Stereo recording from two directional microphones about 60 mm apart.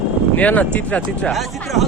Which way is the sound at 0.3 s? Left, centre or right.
Left.